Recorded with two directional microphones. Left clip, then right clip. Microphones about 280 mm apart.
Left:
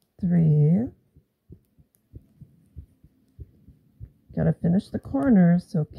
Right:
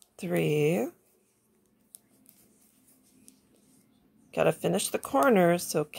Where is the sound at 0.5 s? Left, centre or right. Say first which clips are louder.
Right 1 dB; right.